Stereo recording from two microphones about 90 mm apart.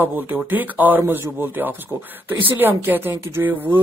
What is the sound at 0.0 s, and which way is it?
Speech, 20° right (ahead or behind).